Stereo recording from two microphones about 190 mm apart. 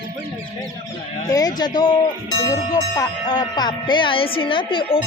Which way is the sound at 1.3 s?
20° left (ahead or behind).